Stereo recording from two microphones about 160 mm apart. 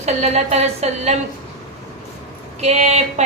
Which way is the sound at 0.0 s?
45° right (ahead or behind).